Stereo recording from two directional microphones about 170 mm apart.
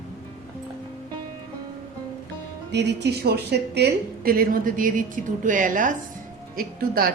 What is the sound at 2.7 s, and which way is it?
A woman's voice, 90° right.